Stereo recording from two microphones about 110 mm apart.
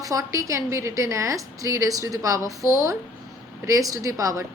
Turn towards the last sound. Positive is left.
turn(degrees=-30)  # may be behind; listen again after turning